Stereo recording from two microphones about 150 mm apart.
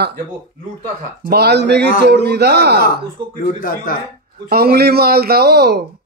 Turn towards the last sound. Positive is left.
turn(degrees=-90)